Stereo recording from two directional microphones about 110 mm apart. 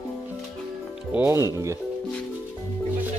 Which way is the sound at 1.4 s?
30° right (ahead or behind).